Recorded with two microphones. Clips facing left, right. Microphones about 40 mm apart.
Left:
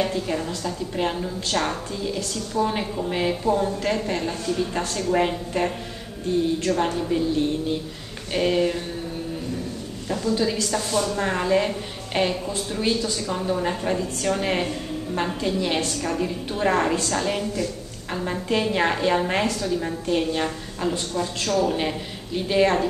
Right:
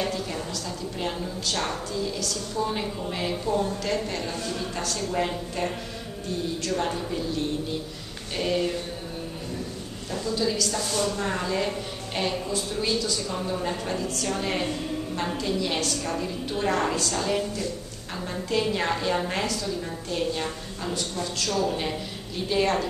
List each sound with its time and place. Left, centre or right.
0.0 s a woman's voice: left
10.2 s a woman's voice: left
10.9 s a woman's voice: centre
11.2 s a woman's voice: left